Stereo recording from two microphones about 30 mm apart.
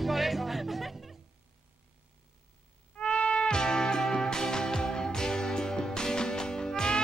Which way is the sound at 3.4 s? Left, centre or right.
Left.